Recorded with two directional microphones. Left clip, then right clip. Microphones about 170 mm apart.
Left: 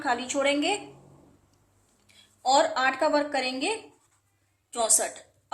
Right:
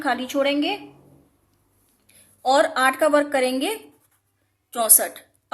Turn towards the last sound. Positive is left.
turn(degrees=-30)  # may be behind; listen again after turning